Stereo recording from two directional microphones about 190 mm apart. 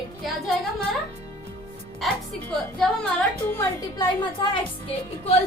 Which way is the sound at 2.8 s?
5° left (ahead or behind).